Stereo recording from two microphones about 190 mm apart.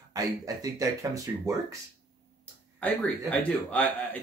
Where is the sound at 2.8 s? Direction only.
5° left (ahead or behind).